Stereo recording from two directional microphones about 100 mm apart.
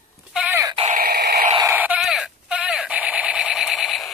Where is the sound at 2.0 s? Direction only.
5° right (ahead or behind).